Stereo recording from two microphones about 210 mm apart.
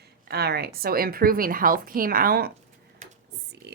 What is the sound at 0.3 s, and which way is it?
A woman's voice, 50° right (ahead or behind).